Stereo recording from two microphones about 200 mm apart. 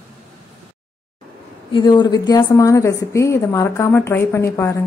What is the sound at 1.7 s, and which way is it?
A woman's voice, 25° left (ahead or behind).